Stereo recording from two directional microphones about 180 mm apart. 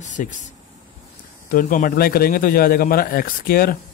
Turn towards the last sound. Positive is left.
turn(degrees=55)  # may be behind; listen again after turning